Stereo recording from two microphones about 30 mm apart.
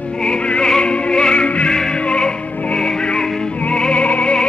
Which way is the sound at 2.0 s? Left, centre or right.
Left.